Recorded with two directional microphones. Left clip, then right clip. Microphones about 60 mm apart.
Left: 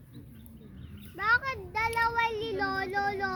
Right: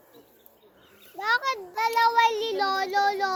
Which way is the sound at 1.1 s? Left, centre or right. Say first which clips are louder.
Right 2 dB; left.